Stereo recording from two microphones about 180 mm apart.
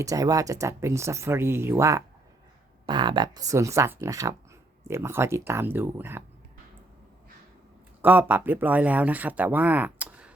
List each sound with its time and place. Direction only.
0.0 s speech: 20° right (ahead or behind)
8.0 s speech: 10° right (ahead or behind)